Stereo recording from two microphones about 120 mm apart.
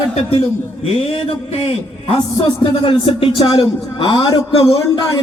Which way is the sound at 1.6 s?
50° left (ahead or behind).